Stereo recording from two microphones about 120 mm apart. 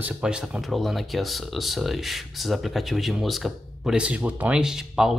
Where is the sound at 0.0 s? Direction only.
10° right (ahead or behind).